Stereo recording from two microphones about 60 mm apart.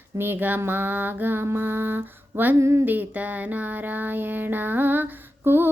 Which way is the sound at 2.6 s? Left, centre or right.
Right.